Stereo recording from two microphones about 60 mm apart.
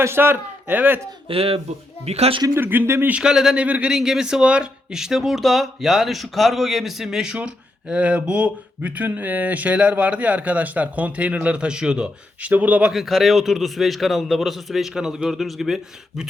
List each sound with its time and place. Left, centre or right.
0.0 s a man's voice: right
2.6 s speech: right
3.1 s speech: centre
3.6 s speech: right
3.9 s speech: centre
7.3 s speech: centre
12.5 s speech: right
12.9 s speech: centre